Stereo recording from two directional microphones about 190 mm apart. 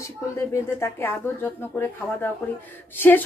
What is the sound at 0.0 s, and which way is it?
A woman's voice, 15° left (ahead or behind).